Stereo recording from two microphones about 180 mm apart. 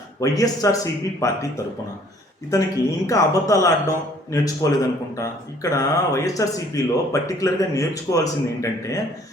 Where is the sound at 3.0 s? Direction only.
20° left (ahead or behind).